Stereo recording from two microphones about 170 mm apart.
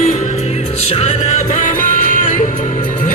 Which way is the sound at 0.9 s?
40° left (ahead or behind).